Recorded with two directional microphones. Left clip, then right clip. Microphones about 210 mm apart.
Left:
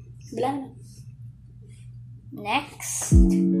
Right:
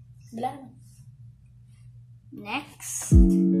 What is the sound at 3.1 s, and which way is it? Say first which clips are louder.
Music: even; centre (ahead or behind).